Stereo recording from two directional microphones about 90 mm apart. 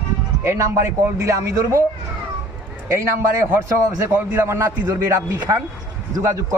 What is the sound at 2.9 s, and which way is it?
A man's voice, 30° right (ahead or behind).